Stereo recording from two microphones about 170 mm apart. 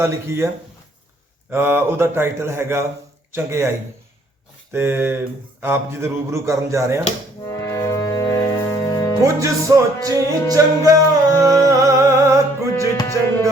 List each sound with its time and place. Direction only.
0.0 s a man's voice: 15° right (ahead or behind)
4.7 s a man's voice: 15° right (ahead or behind)
7.5 s music: 15° left (ahead or behind)
9.2 s music: 20° right (ahead or behind)
13.2 s a man's voice: 15° right (ahead or behind)